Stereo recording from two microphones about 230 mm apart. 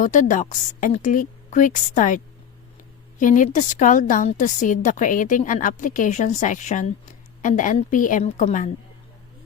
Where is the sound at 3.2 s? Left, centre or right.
Left.